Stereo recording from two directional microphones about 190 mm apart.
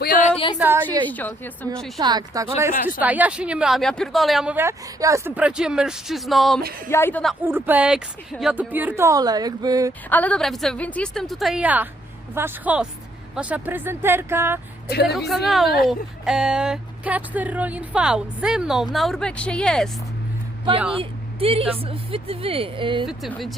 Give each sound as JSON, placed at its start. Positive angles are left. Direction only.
{"t": 0.0, "sound": "a sound", "side_deg": 45}
{"t": 0.6, "sound": "speech", "side_deg": -10}
{"t": 1.0, "sound": "a woman's voice", "side_deg": 10}
{"t": 2.0, "sound": "speech", "side_deg": -20}
{"t": 3.0, "sound": "speech", "side_deg": -10}
{"t": 6.8, "sound": "a woman's voice", "side_deg": 10}
{"t": 7.4, "sound": "speech", "side_deg": -10}
{"t": 10.1, "sound": "speech", "side_deg": 5}
{"t": 15.4, "sound": "speech", "side_deg": 0}
{"t": 20.9, "sound": "speech", "side_deg": -30}
{"t": 23.0, "sound": "speech", "side_deg": 0}